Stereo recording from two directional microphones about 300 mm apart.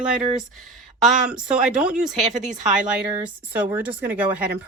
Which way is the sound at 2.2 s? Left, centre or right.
Right.